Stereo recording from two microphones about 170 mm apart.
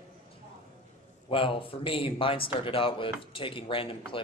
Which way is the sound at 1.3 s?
30° left (ahead or behind).